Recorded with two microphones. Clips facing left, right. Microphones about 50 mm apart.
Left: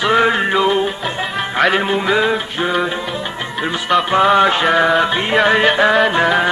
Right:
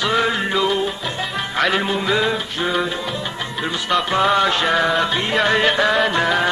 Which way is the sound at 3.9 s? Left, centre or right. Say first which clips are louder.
Left 5 dB; centre.